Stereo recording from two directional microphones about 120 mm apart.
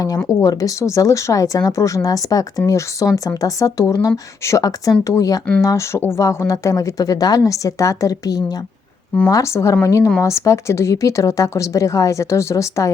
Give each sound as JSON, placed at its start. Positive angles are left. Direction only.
{"t": 0.4, "sound": "speech", "side_deg": 30}